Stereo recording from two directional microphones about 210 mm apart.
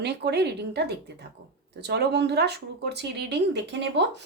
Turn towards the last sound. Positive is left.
turn(degrees=-55)  # may be behind; listen again after turning